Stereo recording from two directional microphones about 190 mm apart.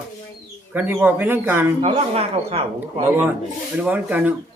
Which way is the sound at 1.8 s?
30° right (ahead or behind).